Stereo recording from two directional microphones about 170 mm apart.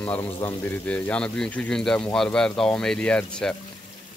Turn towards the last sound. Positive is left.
turn(degrees=5)  # may be behind; listen again after turning